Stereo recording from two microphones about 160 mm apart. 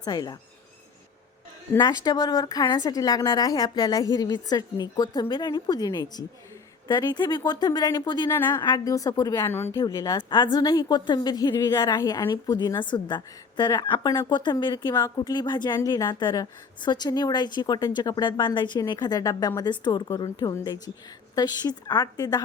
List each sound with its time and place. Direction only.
0.0 s a woman's voice: 25° left (ahead or behind)
1.7 s a woman's voice: 25° left (ahead or behind)
8.3 s a woman's voice: 15° left (ahead or behind)